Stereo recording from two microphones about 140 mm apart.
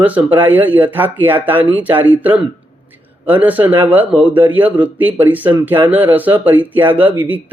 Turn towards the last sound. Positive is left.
turn(degrees=-15)  # may be behind; listen again after turning